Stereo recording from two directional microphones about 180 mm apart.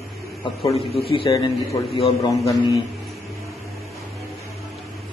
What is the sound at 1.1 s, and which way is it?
A man's voice, 25° left (ahead or behind).